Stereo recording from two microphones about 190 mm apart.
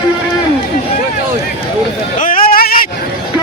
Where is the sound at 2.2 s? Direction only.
45° left (ahead or behind).